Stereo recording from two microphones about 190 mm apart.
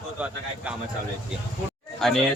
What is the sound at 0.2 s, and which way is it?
Speech, 5° right (ahead or behind).